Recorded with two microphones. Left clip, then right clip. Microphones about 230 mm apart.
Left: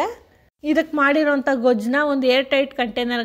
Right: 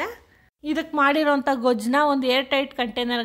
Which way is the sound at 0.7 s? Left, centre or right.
Centre.